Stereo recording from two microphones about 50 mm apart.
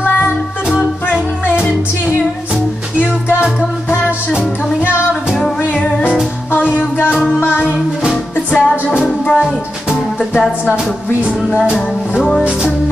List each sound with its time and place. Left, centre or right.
4.3 s music: centre
5.6 s music: left
6.5 s music: left
8.5 s music: left
9.3 s music: centre